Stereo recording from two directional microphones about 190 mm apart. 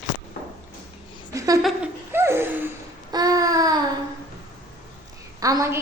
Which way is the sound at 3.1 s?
20° right (ahead or behind).